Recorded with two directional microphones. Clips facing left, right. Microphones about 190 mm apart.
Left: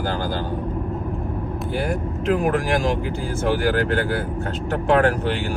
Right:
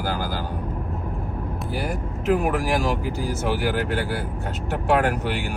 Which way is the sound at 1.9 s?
Centre (ahead or behind).